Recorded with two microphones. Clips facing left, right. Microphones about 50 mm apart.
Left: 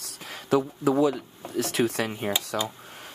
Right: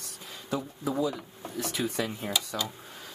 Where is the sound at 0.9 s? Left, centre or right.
Left.